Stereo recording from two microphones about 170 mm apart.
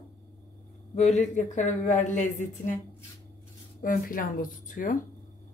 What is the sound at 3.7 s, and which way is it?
Speech, 55° left (ahead or behind).